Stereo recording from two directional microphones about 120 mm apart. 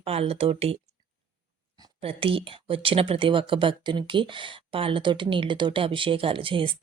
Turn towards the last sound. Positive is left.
turn(degrees=-45)  # may be behind; listen again after turning